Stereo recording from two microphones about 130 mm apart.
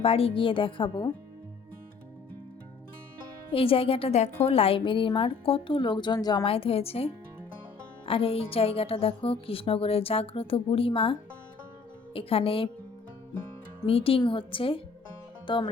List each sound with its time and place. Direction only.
0.0 s speech: 45° left (ahead or behind)
3.5 s a woman's voice: 45° left (ahead or behind)
13.8 s a woman's voice: 45° left (ahead or behind)